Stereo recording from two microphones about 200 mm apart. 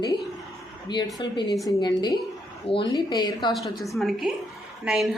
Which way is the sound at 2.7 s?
20° left (ahead or behind).